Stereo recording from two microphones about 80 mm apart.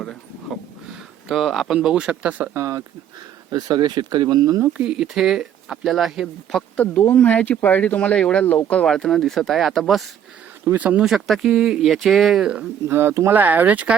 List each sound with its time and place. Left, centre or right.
0.0 s a sound: centre
1.3 s speech: centre
2.6 s speech: right
3.5 s speech: right
4.8 s speech: centre
6.6 s speech: centre
10.8 s speech: centre
11.0 s speech: centre
12.9 s speech: right